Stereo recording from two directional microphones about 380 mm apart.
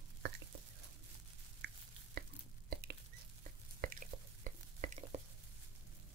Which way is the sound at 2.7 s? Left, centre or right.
Right.